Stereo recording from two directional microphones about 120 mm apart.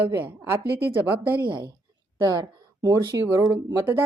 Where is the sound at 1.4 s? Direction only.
40° right (ahead or behind).